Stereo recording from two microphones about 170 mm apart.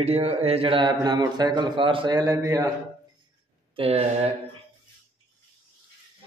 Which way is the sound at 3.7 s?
35° right (ahead or behind).